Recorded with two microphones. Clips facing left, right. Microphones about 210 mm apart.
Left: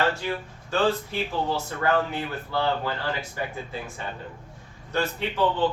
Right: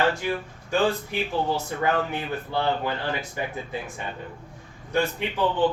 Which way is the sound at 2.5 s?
20° right (ahead or behind).